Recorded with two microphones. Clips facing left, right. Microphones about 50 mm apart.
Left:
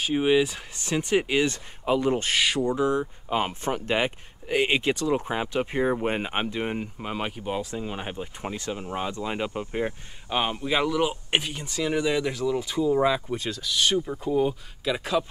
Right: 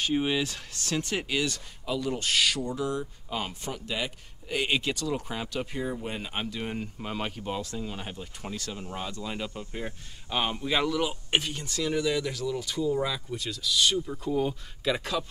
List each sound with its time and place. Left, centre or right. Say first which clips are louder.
0.0 s speech: left 5 dB; centre
3.7 s speech: left 8 dB; left
4.5 s speech: left 5 dB; left
5.8 s speech: left 11 dB; left
10.3 s speech: left 3 dB; centre